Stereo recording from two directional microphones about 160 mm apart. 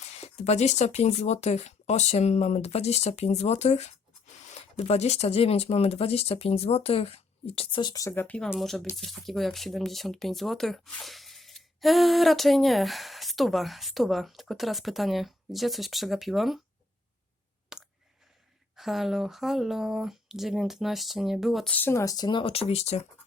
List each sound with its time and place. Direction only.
0.0 s speech: 45° left (ahead or behind); by 16.6 s centre (ahead or behind)
17.7 s clicking: 5° right (ahead or behind)
18.8 s speech: centre (ahead or behind); by 23.0 s 40° left (ahead or behind)